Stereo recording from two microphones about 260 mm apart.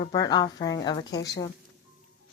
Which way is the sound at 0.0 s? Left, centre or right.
Centre.